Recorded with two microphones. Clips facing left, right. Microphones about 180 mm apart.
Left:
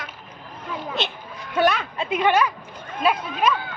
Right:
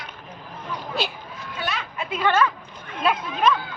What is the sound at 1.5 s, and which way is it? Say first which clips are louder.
Speech: left 11 dB; 60° left (ahead or behind).